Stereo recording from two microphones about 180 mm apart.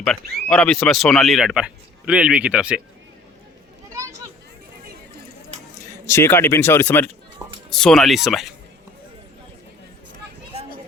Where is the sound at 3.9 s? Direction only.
15° right (ahead or behind).